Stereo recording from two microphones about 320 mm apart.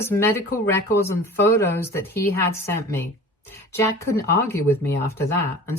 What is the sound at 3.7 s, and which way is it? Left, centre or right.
Speech, centre.